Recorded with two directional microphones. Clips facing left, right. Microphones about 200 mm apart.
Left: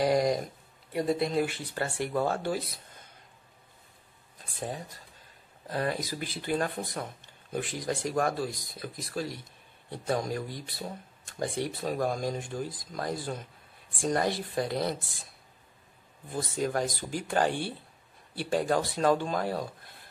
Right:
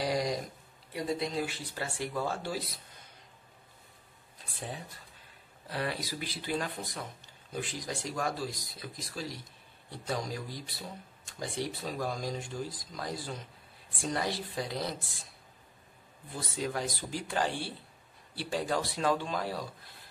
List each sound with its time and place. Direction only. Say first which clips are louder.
0.0 s a sound: left 6 dB; 55° left (ahead or behind)
0.9 s speech: left 6 dB; 55° left (ahead or behind)
4.6 s speech: left 5 dB; 45° left (ahead or behind)
16.3 s speech: left 5 dB; 50° left (ahead or behind)